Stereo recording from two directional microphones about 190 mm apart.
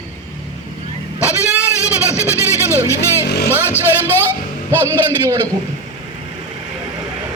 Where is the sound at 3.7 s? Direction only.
10° left (ahead or behind).